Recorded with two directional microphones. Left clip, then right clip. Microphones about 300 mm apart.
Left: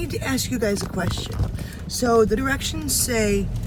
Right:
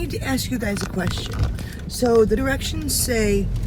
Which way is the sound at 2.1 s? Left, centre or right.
Right.